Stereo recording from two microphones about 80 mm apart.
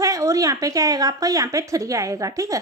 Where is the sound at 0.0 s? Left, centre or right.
Right.